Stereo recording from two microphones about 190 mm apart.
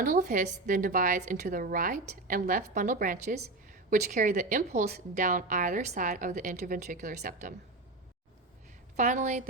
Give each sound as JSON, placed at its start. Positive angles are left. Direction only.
{"t": 0.0, "sound": "speech", "side_deg": -45}
{"t": 9.0, "sound": "a woman's voice", "side_deg": -40}